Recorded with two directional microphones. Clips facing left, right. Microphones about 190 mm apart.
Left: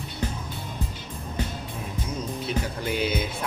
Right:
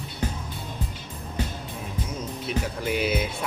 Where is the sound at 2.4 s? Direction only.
5° right (ahead or behind).